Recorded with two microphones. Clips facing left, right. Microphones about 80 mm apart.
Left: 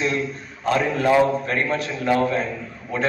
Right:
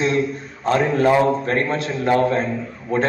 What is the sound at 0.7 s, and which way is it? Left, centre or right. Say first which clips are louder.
A man's voice: right 3 dB; right.